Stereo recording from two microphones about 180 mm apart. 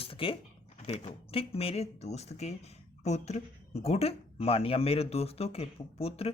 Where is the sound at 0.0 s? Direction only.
30° left (ahead or behind).